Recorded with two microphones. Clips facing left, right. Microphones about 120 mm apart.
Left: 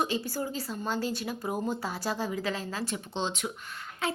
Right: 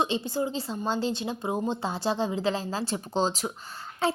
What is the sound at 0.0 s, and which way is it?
Speech, 20° right (ahead or behind).